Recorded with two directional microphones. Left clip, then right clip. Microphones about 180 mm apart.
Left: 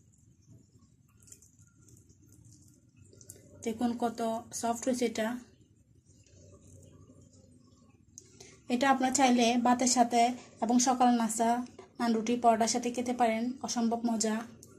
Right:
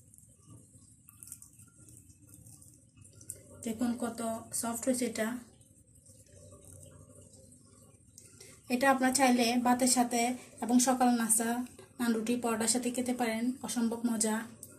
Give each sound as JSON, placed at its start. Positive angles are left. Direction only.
{"t": 3.6, "sound": "speech", "side_deg": 45}
{"t": 8.6, "sound": "a sound", "side_deg": 40}
{"t": 9.1, "sound": "a woman's voice", "side_deg": 40}